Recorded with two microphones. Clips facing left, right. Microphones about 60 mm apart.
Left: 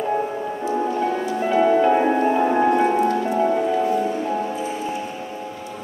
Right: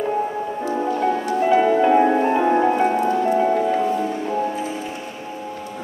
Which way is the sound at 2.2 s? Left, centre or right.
Centre.